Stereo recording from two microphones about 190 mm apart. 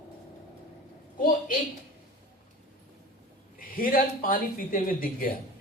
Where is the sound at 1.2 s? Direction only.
45° left (ahead or behind).